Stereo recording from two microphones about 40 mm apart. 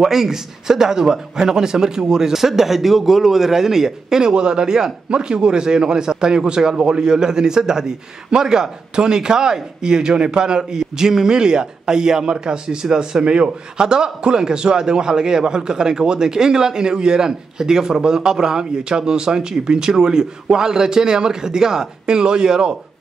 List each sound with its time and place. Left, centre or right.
0.0 s a man's voice: centre
4.3 s a man's voice: right